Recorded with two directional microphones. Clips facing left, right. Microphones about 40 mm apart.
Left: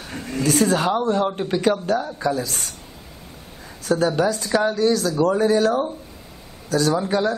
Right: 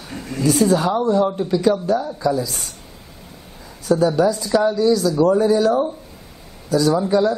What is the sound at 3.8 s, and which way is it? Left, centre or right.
A man's voice, left.